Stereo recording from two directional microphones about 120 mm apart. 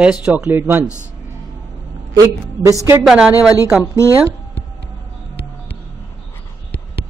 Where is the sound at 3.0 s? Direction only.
10° right (ahead or behind).